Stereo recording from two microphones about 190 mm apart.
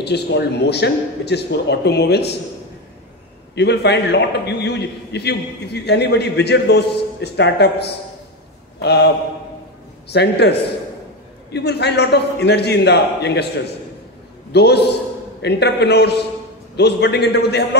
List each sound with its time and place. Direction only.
0.0 s a man's voice: 60° left (ahead or behind)
3.5 s a man's voice: 60° left (ahead or behind)
11.5 s a man's voice: 60° left (ahead or behind)
14.5 s a man's voice: 60° left (ahead or behind)